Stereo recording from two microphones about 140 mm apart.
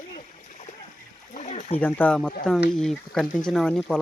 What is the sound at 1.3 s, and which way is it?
Speech, 55° left (ahead or behind).